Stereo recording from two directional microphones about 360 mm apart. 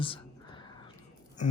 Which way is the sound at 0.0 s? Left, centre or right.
Centre.